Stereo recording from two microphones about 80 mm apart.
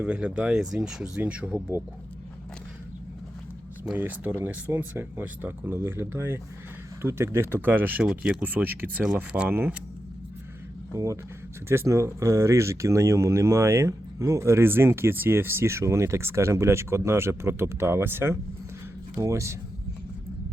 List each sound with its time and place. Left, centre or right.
0.0 s speech: centre
3.9 s speech: right
10.9 s speech: right